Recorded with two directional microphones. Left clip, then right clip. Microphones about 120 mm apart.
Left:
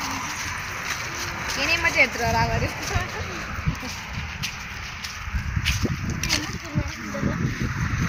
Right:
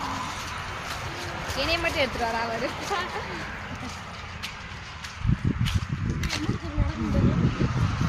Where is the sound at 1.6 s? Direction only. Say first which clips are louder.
Left 4 dB; 25° right (ahead or behind).